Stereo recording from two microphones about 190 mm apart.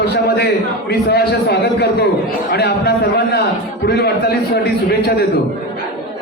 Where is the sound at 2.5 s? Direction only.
55° left (ahead or behind).